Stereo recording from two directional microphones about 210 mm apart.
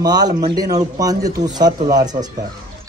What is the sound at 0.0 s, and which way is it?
A man's voice, 20° right (ahead or behind).